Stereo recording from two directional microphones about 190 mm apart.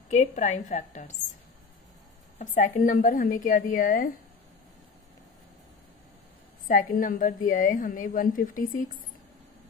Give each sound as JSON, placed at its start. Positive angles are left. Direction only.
{"t": 0.1, "sound": "a woman's voice", "side_deg": 40}
{"t": 2.3, "sound": "a woman's voice", "side_deg": 40}
{"t": 6.7, "sound": "a woman's voice", "side_deg": 45}